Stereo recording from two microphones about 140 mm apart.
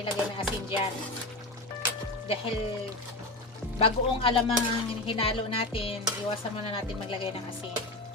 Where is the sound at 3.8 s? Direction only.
40° left (ahead or behind).